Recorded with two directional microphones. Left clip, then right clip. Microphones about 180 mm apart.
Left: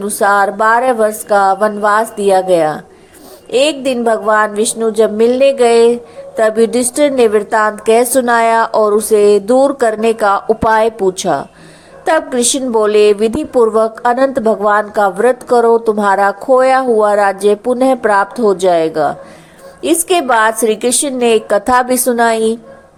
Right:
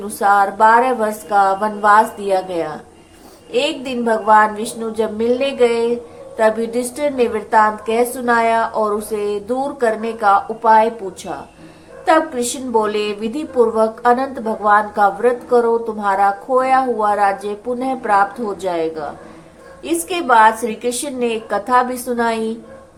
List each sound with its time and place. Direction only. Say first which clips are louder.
0.0 s a woman's voice: left 3 dB; 40° left (ahead or behind)